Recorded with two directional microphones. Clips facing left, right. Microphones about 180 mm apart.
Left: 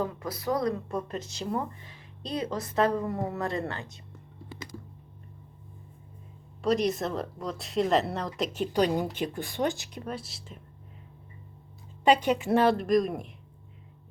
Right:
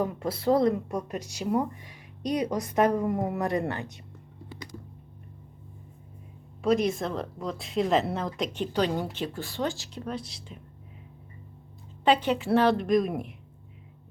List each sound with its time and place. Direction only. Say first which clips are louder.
0.0 s speech: right 4 dB; 25° right (ahead or behind)
0.9 s speech: right 1 dB; 10° right (ahead or behind)
6.6 s a woman's voice: right 1 dB; centre (ahead or behind)
12.0 s a woman's voice: left 1 dB; 15° left (ahead or behind)
12.7 s speech: right 1 dB; centre (ahead or behind)